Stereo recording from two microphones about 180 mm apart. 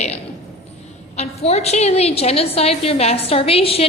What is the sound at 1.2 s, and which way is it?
A woman's voice, 35° left (ahead or behind).